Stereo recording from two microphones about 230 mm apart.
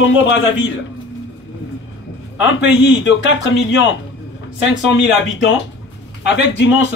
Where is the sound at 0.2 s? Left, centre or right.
Left.